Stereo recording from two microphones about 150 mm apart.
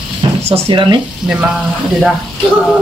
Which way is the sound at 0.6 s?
30° right (ahead or behind).